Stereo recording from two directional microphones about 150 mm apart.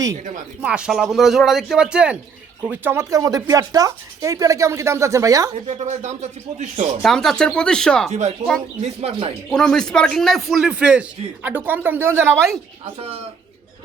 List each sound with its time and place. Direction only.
0.6 s speech: 5° right (ahead or behind)
5.6 s speech: 50° right (ahead or behind)
7.0 s speech: centre (ahead or behind)
8.4 s speech: 50° right (ahead or behind)
9.5 s speech: 5° left (ahead or behind); by 12.5 s 15° right (ahead or behind)
13.0 s a man's voice: 40° right (ahead or behind)